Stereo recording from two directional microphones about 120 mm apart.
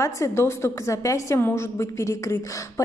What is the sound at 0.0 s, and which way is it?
A woman's voice, 25° left (ahead or behind).